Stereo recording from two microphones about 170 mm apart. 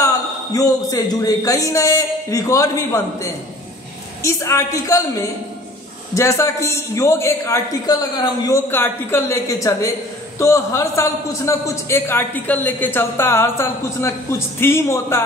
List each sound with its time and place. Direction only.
0.0 s a man's voice: 20° left (ahead or behind)
6.1 s a man's voice: 15° left (ahead or behind)